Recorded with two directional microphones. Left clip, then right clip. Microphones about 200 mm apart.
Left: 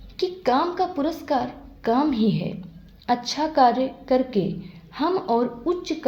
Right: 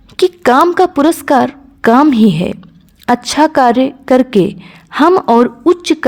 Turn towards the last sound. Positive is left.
turn(degrees=-55)  # may be behind; listen again after turning